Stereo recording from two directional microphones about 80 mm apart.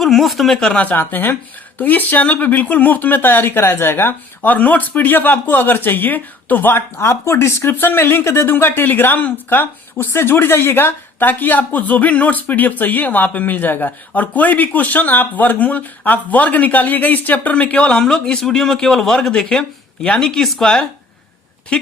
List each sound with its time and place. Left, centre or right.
0.0 s speech: centre